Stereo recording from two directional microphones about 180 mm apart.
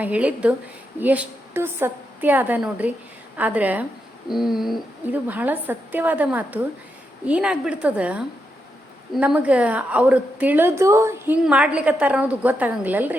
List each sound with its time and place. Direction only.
0.0 s a woman's voice: 5° right (ahead or behind)